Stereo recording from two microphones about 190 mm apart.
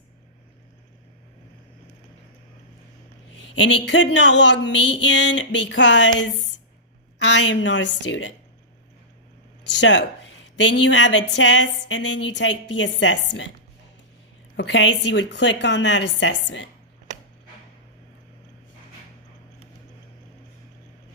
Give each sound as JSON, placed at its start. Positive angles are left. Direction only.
{"t": 3.5, "sound": "speech", "side_deg": 75}
{"t": 9.6, "sound": "speech", "side_deg": 70}
{"t": 14.5, "sound": "speech", "side_deg": 70}